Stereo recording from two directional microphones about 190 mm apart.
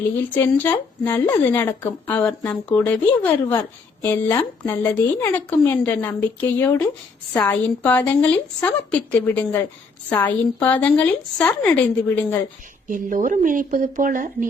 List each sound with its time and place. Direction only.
0.3 s speech: 10° left (ahead or behind)
12.9 s speech: 45° right (ahead or behind)